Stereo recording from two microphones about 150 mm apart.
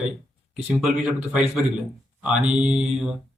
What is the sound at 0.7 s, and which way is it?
Speech, 5° right (ahead or behind).